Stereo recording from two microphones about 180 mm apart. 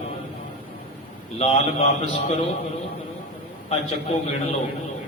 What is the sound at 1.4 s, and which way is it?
Speech, 35° left (ahead or behind).